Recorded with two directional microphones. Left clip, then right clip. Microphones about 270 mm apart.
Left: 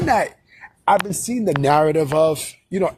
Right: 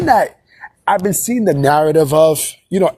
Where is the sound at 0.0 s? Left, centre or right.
Centre.